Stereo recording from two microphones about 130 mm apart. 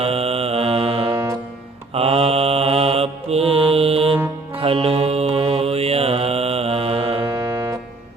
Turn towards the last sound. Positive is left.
turn(degrees=-25)  # may be behind; listen again after turning